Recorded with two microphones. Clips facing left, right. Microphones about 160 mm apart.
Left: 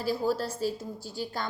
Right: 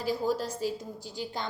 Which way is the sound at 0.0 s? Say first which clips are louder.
Left 1 dB; 15° right (ahead or behind).